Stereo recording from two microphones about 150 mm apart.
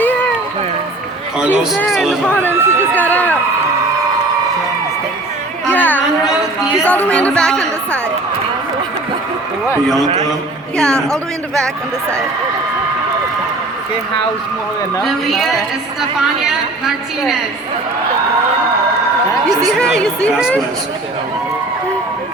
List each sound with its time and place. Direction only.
1.4 s speech: 5° right (ahead or behind)
1.8 s a woman's voice: 5° left (ahead or behind)
2.5 s speech: 15° right (ahead or behind)
2.9 s run: 10° left (ahead or behind)
5.7 s a sound: 10° left (ahead or behind)
6.8 s speech: 10° left (ahead or behind)
10.8 s a woman's voice: 5° left (ahead or behind)
15.0 s a woman's voice: centre (ahead or behind)
19.6 s a woman's voice: 5° left (ahead or behind)